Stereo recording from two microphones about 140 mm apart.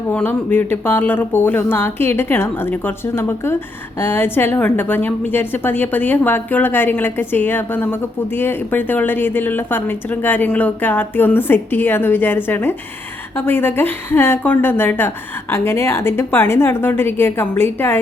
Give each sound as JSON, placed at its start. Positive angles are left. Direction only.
{"t": 0.1, "sound": "a woman's voice", "side_deg": 15}